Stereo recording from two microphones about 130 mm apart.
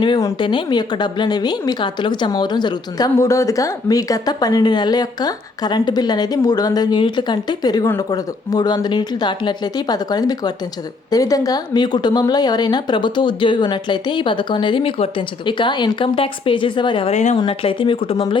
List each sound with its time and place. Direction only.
0.3 s speech: 40° left (ahead or behind)
17.1 s a woman's voice: 65° left (ahead or behind)
17.4 s speech: 40° left (ahead or behind)